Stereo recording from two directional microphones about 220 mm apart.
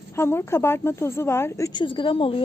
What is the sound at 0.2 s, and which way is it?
Speech, 10° left (ahead or behind).